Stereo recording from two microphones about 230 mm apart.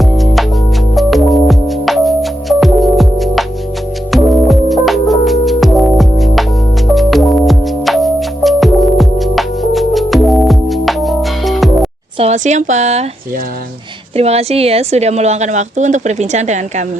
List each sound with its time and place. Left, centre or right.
0.0 s music: centre
12.2 s a woman's voice: right
14.2 s a woman's voice: right